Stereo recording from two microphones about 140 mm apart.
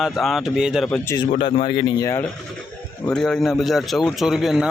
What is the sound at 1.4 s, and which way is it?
Speech, 40° left (ahead or behind).